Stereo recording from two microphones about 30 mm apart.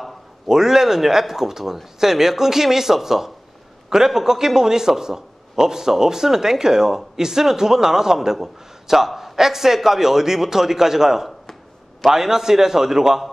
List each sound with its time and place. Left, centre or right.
0.5 s a man's voice: centre